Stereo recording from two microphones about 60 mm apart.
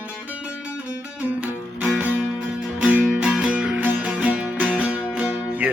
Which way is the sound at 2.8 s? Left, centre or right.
Centre.